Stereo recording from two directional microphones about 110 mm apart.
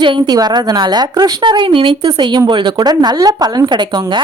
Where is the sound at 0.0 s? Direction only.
45° right (ahead or behind).